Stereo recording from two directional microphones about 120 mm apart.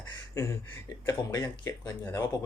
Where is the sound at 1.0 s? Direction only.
35° left (ahead or behind).